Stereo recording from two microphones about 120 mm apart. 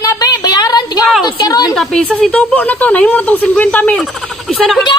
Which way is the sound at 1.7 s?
Centre (ahead or behind).